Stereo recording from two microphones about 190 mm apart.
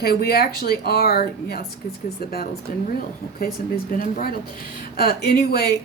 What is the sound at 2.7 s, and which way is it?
Speech, 50° left (ahead or behind).